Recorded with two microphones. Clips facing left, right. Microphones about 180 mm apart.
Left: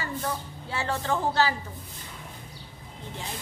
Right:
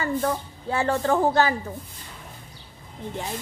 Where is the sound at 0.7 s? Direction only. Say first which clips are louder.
Right 6 dB; 50° right (ahead or behind).